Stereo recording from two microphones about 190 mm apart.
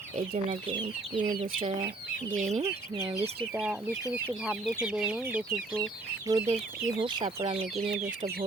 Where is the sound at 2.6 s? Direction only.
15° right (ahead or behind).